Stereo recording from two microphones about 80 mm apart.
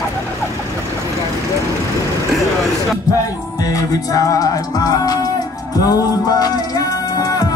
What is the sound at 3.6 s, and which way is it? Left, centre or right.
Music, left.